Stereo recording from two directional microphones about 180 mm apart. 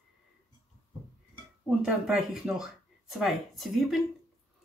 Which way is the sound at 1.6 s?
5° right (ahead or behind).